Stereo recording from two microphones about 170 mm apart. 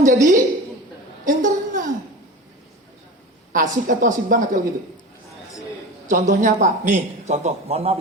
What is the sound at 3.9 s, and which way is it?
Speech, 50° right (ahead or behind).